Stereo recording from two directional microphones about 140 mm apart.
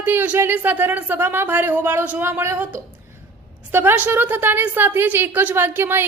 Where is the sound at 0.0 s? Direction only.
15° right (ahead or behind).